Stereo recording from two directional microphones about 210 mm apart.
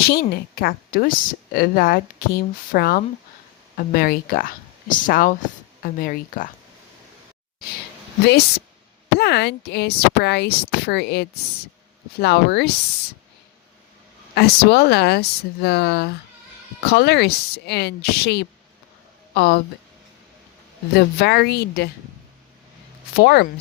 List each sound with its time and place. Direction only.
0.1 s speech: 50° left (ahead or behind)
8.2 s speech: 50° left (ahead or behind)
14.3 s speech: 50° left (ahead or behind)
20.9 s speech: 50° left (ahead or behind)
23.1 s speech: 50° left (ahead or behind)